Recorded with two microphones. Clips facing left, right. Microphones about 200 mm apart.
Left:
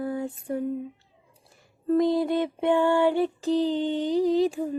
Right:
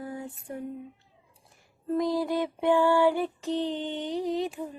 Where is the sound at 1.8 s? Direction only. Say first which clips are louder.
Left 5 dB; 25° left (ahead or behind).